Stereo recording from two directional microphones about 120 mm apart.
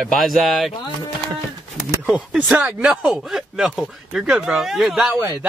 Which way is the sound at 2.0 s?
5° right (ahead or behind).